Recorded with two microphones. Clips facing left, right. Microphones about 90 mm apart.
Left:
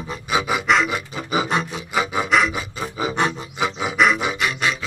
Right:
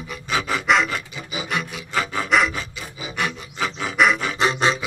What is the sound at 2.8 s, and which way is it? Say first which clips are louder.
Filing: left 8 dB; 40° left (ahead or behind).